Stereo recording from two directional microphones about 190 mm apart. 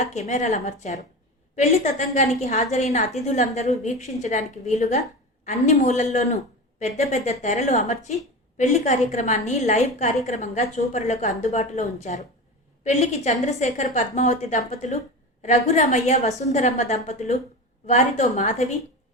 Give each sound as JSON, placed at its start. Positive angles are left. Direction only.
{"t": 0.0, "sound": "a woman's voice", "side_deg": 35}